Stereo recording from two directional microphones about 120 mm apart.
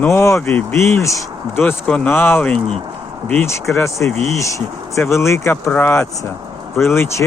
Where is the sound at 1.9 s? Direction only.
5° left (ahead or behind).